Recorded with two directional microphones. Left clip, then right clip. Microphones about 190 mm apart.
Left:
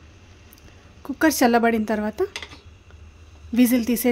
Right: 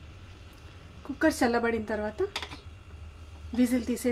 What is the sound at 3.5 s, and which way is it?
Speech, 65° left (ahead or behind).